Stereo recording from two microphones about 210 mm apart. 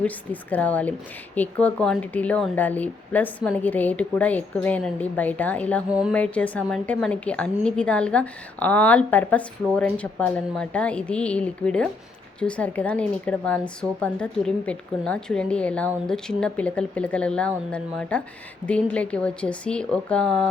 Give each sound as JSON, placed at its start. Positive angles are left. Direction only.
{"t": 0.0, "sound": "speech", "side_deg": 5}
{"t": 5.9, "sound": "speech", "side_deg": -5}
{"t": 6.1, "sound": "speech", "side_deg": 5}